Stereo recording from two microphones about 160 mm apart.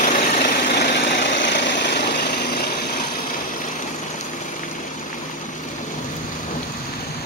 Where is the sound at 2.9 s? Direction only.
55° left (ahead or behind).